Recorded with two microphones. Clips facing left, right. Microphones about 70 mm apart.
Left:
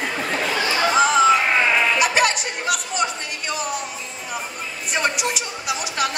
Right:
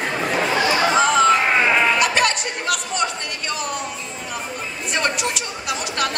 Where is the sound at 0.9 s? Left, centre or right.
Centre.